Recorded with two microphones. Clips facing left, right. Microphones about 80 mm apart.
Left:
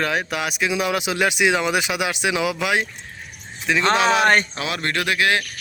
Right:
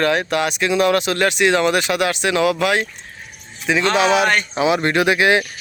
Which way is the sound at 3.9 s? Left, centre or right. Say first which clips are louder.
Right 3 dB; centre.